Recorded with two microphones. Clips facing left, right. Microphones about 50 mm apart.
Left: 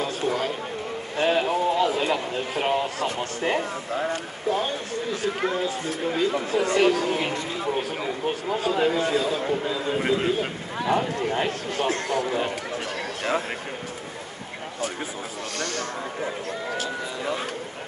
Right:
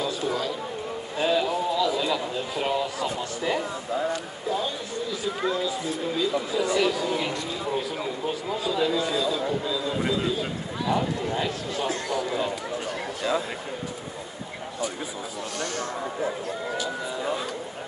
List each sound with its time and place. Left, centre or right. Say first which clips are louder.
0.0 s a man's voice: left 2 dB; left
15.6 s speech: left 1 dB; left
16.8 s speech: even; left